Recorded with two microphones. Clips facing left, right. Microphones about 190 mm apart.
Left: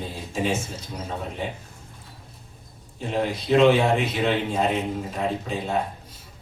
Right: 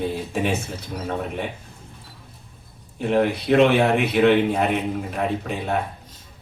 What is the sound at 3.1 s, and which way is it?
Speech, 60° right (ahead or behind).